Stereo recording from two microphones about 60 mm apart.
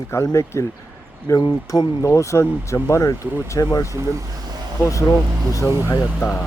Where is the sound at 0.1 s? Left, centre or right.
Left.